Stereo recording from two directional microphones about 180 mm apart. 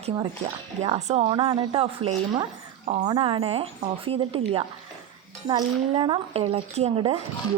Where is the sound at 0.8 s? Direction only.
40° right (ahead or behind).